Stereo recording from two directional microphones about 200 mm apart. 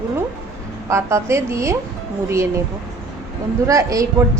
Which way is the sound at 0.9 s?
15° right (ahead or behind).